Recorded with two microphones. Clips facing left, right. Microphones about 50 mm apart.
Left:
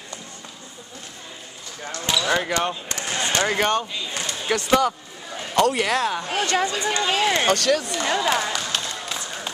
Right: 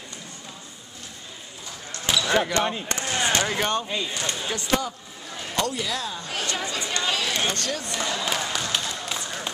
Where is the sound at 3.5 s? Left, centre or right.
Left.